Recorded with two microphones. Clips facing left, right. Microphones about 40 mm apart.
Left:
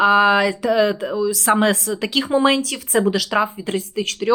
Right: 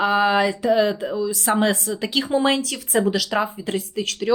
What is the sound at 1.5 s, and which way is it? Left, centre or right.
Speech, centre.